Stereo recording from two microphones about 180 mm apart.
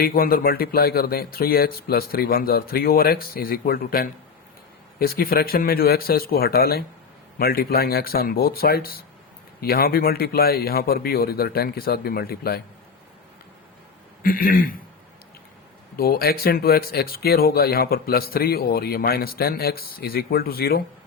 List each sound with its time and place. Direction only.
0.0 s speech: 55° left (ahead or behind)
14.2 s a man's voice: 55° left (ahead or behind)
16.0 s speech: 55° left (ahead or behind)